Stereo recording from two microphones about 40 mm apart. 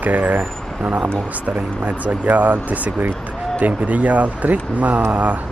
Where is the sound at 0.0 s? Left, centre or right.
Right.